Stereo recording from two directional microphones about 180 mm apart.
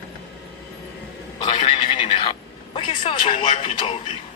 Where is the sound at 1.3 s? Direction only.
30° left (ahead or behind).